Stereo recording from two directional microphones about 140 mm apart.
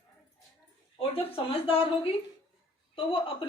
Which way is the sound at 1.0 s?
45° left (ahead or behind).